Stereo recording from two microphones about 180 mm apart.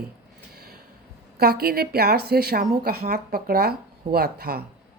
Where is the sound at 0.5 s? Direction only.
60° right (ahead or behind).